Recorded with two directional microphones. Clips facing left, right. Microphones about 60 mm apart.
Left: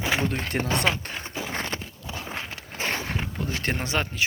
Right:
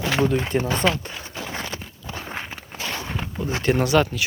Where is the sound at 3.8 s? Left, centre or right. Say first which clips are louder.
Right 11 dB; left.